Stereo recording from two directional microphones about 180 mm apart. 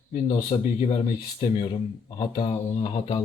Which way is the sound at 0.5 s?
30° left (ahead or behind).